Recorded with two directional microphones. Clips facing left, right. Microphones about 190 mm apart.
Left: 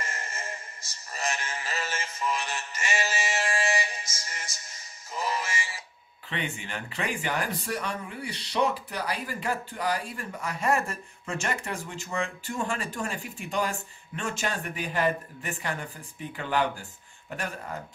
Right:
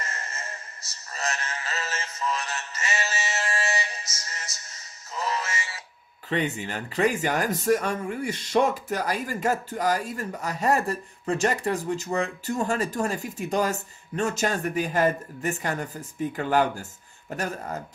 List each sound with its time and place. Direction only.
0.3 s music: 10° left (ahead or behind)
1.1 s synthetic singing: 10° left (ahead or behind)
5.1 s music: 10° left (ahead or behind)
6.3 s speech: 40° right (ahead or behind)